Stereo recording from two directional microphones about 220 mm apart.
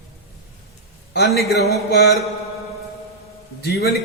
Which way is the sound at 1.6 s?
50° left (ahead or behind).